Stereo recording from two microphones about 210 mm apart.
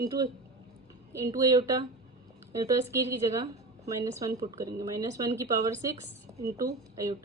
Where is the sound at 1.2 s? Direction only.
15° right (ahead or behind).